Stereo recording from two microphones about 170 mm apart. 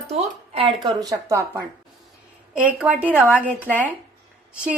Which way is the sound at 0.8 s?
20° right (ahead or behind).